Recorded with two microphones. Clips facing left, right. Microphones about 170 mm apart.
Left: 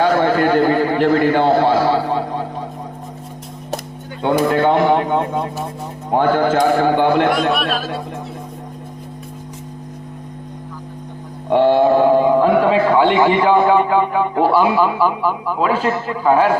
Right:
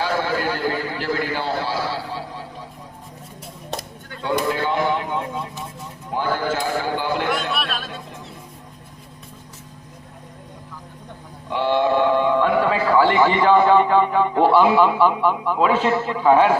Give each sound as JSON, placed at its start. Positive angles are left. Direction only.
{"t": 0.0, "sound": "a man's voice", "side_deg": 60}
{"t": 4.2, "sound": "speech", "side_deg": 60}
{"t": 11.4, "sound": "a man's voice", "side_deg": 50}